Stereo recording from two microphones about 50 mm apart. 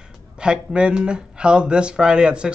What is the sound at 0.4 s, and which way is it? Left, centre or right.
A man's voice, centre.